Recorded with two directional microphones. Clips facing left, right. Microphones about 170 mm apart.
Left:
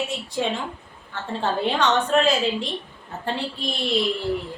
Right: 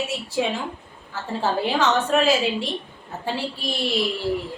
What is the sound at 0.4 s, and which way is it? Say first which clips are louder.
A woman's voice: right 1 dB; 5° right (ahead or behind).